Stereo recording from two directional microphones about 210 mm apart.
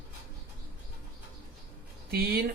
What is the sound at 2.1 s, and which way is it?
Speech, 45° right (ahead or behind).